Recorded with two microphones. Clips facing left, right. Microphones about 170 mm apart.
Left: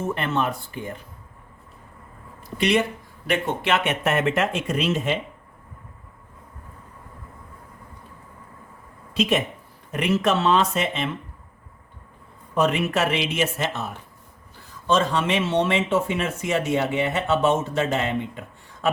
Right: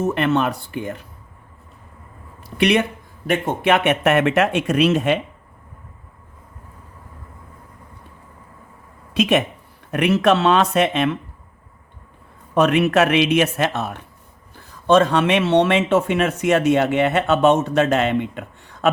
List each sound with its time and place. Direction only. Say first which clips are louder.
0.1 s speech: right 6 dB; 75° right (ahead or behind)
2.6 s speech: right 4 dB; 65° right (ahead or behind)
3.2 s speech: right 5 dB; 45° right (ahead or behind); by 5.2 s 65° right (ahead or behind)
9.1 s speech: right 4 dB; 70° right (ahead or behind)
12.5 s speech: right 6 dB; 70° right (ahead or behind)